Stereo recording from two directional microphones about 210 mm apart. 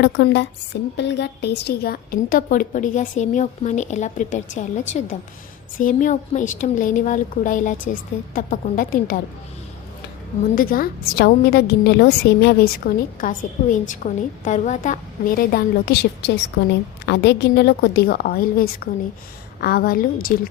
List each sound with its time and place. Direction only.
0.0 s a woman's voice: 55° left (ahead or behind)
10.5 s a woman's voice: 45° left (ahead or behind)